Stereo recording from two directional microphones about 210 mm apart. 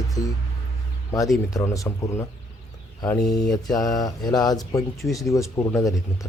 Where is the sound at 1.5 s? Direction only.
15° left (ahead or behind).